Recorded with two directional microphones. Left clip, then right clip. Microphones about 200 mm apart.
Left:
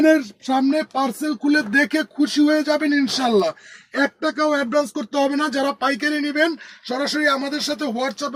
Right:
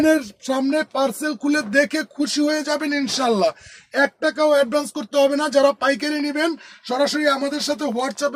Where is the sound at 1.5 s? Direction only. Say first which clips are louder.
Left 1 dB; 25° right (ahead or behind); by 3.5 s 45° right (ahead or behind).